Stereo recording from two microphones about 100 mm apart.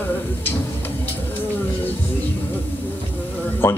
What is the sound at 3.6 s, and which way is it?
Speech, 20° left (ahead or behind).